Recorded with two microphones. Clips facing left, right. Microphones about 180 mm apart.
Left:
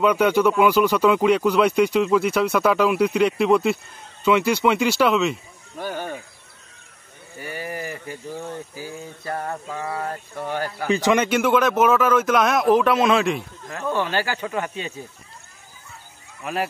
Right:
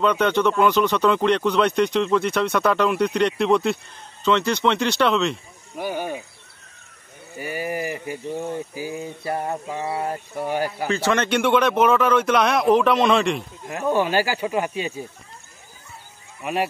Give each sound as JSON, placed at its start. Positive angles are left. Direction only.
{"t": 0.0, "sound": "speech", "side_deg": 10}
{"t": 5.8, "sound": "speech", "side_deg": -10}
{"t": 7.3, "sound": "a sound", "side_deg": -10}
{"t": 10.9, "sound": "speech", "side_deg": 15}
{"t": 11.2, "sound": "speech", "side_deg": 5}
{"t": 13.7, "sound": "a sound", "side_deg": -15}
{"t": 16.4, "sound": "speech", "side_deg": 0}